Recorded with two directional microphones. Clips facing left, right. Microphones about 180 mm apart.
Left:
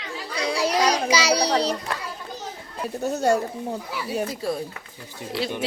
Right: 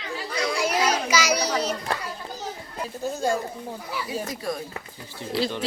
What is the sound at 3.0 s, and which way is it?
Speech, 70° left (ahead or behind).